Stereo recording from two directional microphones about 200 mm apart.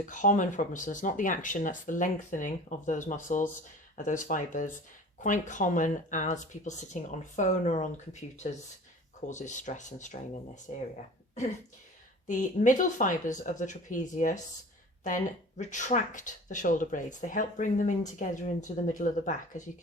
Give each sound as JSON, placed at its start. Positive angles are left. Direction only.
{"t": 0.0, "sound": "speech", "side_deg": 40}
{"t": 12.3, "sound": "speech", "side_deg": 40}